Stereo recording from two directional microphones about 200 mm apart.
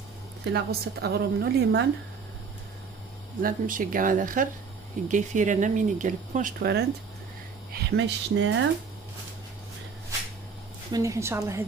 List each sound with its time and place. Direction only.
0.5 s a woman's voice: 55° right (ahead or behind)
3.4 s a woman's voice: 45° right (ahead or behind); by 8.6 s 65° right (ahead or behind)
10.9 s a woman's voice: 15° right (ahead or behind)